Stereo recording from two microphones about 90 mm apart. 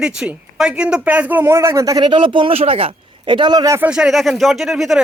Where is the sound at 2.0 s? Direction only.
65° right (ahead or behind).